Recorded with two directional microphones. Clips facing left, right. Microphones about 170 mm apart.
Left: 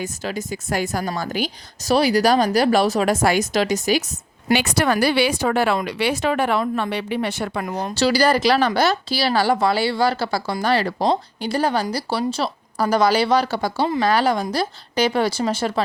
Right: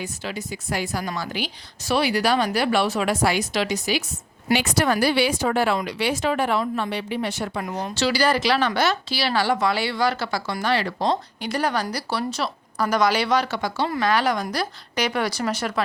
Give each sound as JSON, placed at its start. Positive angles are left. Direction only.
{"t": 0.0, "sound": "a woman's voice", "side_deg": 45}
{"t": 4.5, "sound": "speech", "side_deg": 70}
{"t": 7.9, "sound": "a woman's voice", "side_deg": 40}